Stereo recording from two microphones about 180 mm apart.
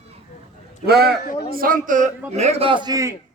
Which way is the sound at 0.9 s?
60° right (ahead or behind).